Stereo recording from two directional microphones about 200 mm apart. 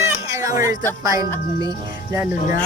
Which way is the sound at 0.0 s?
15° right (ahead or behind).